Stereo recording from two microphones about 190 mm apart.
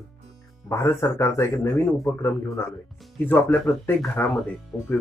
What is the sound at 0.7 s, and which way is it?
Speech, 15° left (ahead or behind).